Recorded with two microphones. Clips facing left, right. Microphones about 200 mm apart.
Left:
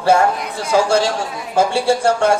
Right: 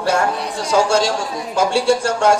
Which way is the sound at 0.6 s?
55° left (ahead or behind).